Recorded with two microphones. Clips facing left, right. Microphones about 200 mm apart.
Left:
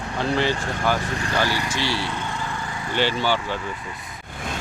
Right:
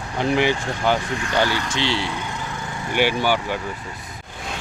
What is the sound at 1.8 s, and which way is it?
Speech, 20° right (ahead or behind).